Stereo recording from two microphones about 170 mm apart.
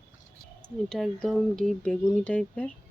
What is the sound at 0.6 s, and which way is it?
Speech, 5° left (ahead or behind).